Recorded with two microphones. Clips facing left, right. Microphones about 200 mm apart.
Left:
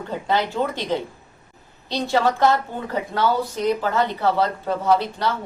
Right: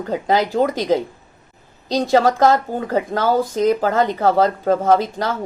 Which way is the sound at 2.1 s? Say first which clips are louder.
Right 4 dB; 40° right (ahead or behind).